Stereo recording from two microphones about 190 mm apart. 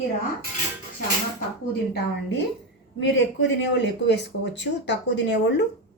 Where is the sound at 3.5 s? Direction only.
65° left (ahead or behind).